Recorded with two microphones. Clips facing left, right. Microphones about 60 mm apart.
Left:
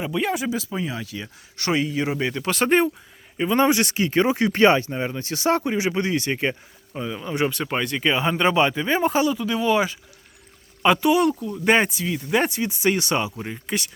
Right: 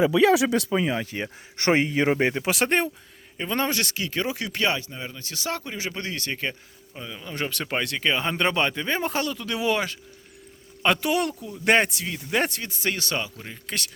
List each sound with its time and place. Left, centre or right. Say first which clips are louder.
0.2 s speech: right 5 dB; right
2.5 s speech: left 4 dB; centre
3.6 s speech: left 8 dB; centre